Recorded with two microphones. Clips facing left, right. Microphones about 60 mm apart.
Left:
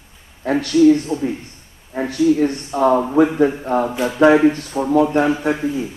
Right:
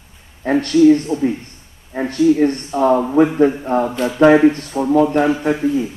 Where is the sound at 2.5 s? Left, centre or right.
Centre.